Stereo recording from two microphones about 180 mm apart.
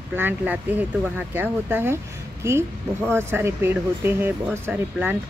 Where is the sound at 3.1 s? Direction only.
15° right (ahead or behind).